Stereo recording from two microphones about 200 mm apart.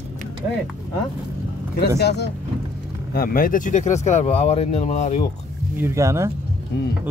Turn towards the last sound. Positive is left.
turn(degrees=-15)  # may be behind; listen again after turning